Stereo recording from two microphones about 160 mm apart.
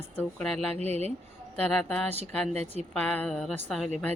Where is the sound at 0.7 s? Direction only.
40° right (ahead or behind).